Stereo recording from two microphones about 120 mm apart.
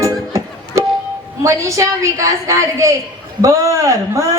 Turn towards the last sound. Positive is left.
turn(degrees=-25)  # may be behind; listen again after turning